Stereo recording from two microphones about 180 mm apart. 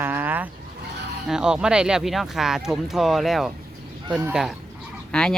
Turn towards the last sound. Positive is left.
turn(degrees=5)  # may be behind; listen again after turning